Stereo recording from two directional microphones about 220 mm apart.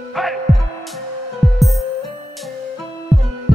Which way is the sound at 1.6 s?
Centre (ahead or behind).